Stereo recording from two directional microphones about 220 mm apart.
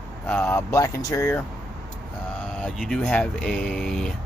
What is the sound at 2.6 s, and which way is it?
Speech, centre (ahead or behind).